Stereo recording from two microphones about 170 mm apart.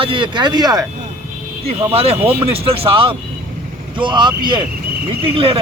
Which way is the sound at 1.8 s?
35° right (ahead or behind).